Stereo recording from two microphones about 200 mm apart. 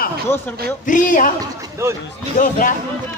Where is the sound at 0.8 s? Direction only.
40° left (ahead or behind).